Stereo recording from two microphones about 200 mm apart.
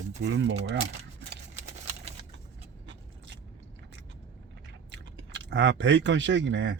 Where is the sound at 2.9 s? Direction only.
60° right (ahead or behind).